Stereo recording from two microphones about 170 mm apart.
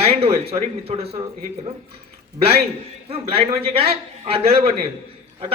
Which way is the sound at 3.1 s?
35° right (ahead or behind).